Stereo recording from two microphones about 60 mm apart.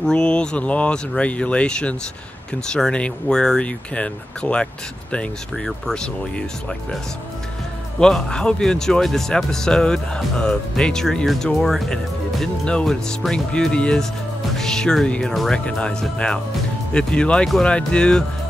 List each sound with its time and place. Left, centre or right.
0.0 s speech: centre
8.0 s speech: centre
12.6 s speech: centre